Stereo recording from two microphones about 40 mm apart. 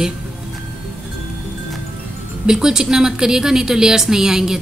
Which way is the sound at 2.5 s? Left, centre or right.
Centre.